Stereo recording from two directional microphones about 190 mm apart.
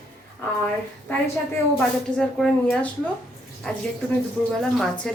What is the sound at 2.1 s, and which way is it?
A woman's voice, 5° left (ahead or behind).